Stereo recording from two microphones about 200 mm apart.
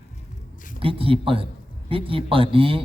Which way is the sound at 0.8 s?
25° right (ahead or behind).